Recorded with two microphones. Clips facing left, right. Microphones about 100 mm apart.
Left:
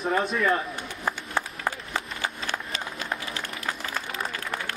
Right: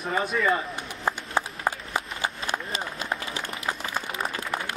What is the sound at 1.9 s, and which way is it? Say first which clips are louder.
Run: right 1 dB; 15° right (ahead or behind).